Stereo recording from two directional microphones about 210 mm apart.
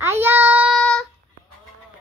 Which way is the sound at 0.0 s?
10° right (ahead or behind).